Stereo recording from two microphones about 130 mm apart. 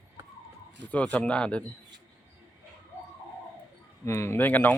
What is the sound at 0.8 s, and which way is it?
Speech, 10° left (ahead or behind).